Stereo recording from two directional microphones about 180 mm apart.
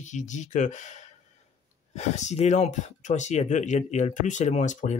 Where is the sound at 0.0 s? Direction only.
40° left (ahead or behind).